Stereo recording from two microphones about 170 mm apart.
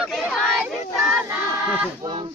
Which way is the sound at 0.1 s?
5° left (ahead or behind).